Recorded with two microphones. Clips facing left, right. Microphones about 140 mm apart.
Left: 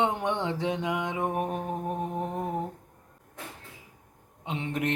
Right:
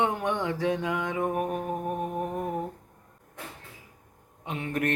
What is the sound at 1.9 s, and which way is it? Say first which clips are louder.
Music: right 1 dB; 10° right (ahead or behind).